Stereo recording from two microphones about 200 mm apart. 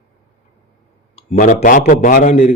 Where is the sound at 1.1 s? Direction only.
35° left (ahead or behind).